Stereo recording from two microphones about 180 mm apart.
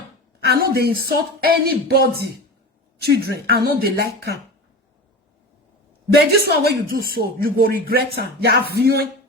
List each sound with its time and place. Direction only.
0.3 s speech: 60° right (ahead or behind)
6.1 s speech: 60° right (ahead or behind)